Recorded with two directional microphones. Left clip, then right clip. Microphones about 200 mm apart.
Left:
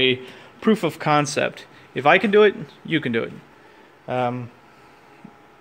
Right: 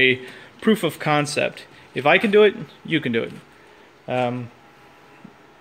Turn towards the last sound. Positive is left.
turn(degrees=-5)  # may be behind; listen again after turning